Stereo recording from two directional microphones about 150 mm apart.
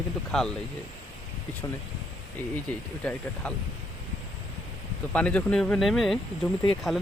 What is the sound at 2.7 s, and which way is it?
Speech, 10° left (ahead or behind).